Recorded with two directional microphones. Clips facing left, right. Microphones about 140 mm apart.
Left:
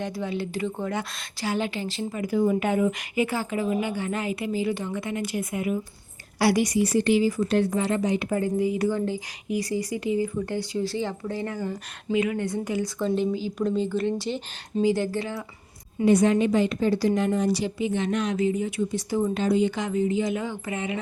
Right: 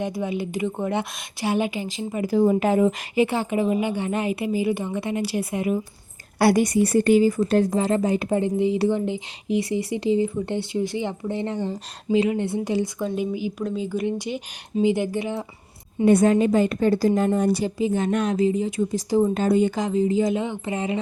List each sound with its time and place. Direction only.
0.0 s a woman's voice: 15° right (ahead or behind)
2.2 s speech: 35° right (ahead or behind)
6.4 s a woman's voice: 50° right (ahead or behind)
8.3 s speech: 25° right (ahead or behind)
13.1 s a woman's voice: 15° right (ahead or behind)
13.6 s a woman's voice: 5° right (ahead or behind); by 15.4 s 20° right (ahead or behind)
16.0 s a woman's voice: 50° right (ahead or behind)
18.3 s speech: 35° right (ahead or behind)
19.3 s a woman's voice: 45° right (ahead or behind)
19.9 s speech: 35° right (ahead or behind)
20.3 s speech: 25° right (ahead or behind)